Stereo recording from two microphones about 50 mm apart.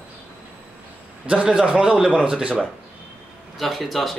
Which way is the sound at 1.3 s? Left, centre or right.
Centre.